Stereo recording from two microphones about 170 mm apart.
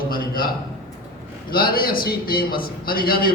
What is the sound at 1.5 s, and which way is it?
A man's voice, 60° left (ahead or behind).